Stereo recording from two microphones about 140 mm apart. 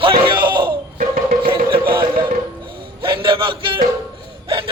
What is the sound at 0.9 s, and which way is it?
Music, 75° right (ahead or behind).